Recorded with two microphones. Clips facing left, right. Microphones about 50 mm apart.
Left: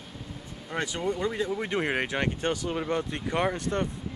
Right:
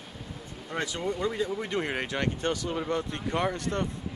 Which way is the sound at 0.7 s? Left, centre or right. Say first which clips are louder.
Left 1 dB; centre.